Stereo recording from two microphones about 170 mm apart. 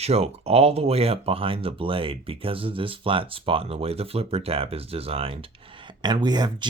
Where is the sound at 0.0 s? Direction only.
40° right (ahead or behind).